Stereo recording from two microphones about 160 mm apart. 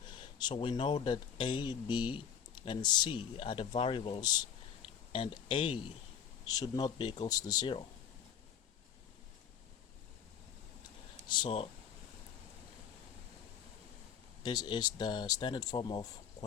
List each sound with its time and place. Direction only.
0.1 s speech: 30° left (ahead or behind)
11.3 s speech: 30° left (ahead or behind)
14.4 s speech: 25° left (ahead or behind)